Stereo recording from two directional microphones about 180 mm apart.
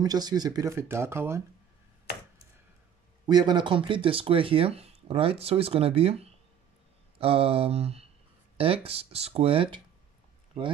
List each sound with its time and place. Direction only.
0.0 s speech: 20° right (ahead or behind)
3.3 s speech: 25° right (ahead or behind)